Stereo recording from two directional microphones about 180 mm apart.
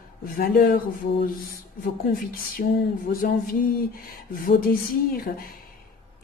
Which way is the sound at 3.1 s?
55° left (ahead or behind).